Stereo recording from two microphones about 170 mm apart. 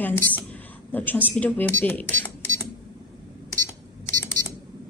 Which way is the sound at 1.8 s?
10° left (ahead or behind).